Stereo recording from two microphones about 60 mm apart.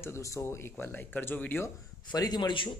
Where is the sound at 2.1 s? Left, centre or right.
Left.